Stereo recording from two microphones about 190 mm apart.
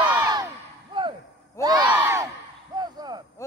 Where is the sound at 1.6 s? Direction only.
15° left (ahead or behind).